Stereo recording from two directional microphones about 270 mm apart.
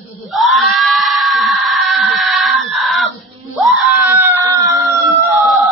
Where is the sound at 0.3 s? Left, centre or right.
Centre.